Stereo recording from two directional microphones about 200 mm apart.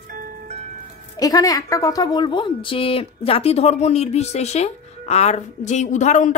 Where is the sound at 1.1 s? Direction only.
20° left (ahead or behind); by 6.3 s 35° left (ahead or behind).